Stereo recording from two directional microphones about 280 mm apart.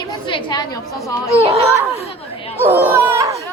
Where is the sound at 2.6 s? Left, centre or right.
Centre.